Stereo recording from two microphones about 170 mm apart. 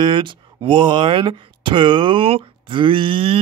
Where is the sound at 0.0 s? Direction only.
30° right (ahead or behind).